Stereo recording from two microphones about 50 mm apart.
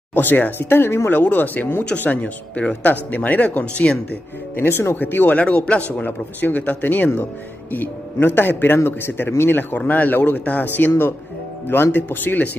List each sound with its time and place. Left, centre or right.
0.1 s speech: left
1.1 s a man's voice: left
2.0 s a man's voice: left
4.6 s speech: left
5.4 s speech: left
5.9 s a man's voice: left
8.7 s a man's voice: left